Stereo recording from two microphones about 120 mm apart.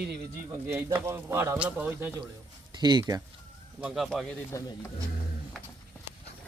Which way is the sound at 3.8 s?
5° right (ahead or behind).